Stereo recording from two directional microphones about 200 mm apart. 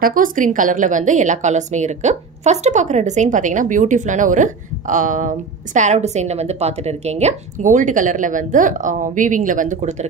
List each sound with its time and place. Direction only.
0.0 s a woman's voice: 45° right (ahead or behind)